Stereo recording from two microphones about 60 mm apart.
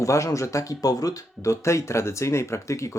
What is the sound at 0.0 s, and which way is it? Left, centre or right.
Speech, left.